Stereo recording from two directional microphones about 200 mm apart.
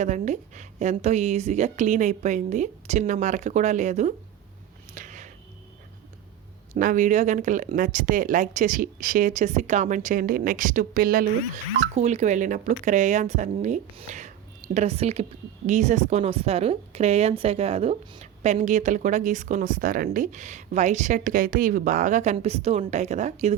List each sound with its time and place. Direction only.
0.0 s speech: 35° right (ahead or behind)
4.9 s a sound: 40° right (ahead or behind)
6.7 s speech: 40° right (ahead or behind)
11.9 s speech: 35° right (ahead or behind)